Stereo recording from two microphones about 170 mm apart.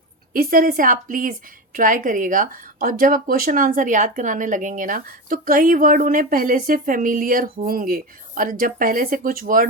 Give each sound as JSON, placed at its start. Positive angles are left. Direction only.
{"t": 0.3, "sound": "a woman's voice", "side_deg": -60}